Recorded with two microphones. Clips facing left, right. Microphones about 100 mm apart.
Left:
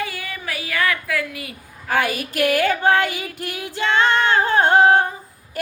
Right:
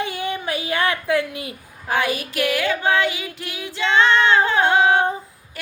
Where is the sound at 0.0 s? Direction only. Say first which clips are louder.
Right 4 dB; 25° right (ahead or behind).